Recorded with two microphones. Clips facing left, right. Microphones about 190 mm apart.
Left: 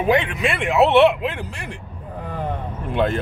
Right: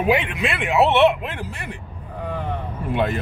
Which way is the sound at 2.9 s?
5° right (ahead or behind).